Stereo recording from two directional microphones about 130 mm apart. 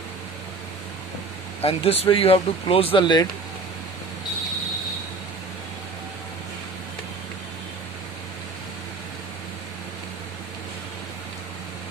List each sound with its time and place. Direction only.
1.6 s speech: 50° left (ahead or behind)